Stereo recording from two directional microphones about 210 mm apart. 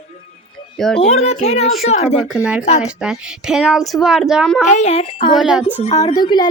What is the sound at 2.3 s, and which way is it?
Speech, 5° right (ahead or behind).